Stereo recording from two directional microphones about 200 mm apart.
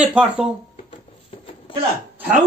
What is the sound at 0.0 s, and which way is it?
Speech, 5° right (ahead or behind).